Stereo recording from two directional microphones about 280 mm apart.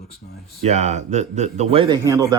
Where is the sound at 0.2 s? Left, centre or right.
Left.